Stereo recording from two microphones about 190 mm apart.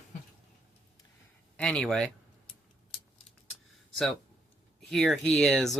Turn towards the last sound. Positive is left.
turn(degrees=0)  # may be behind; listen again after turning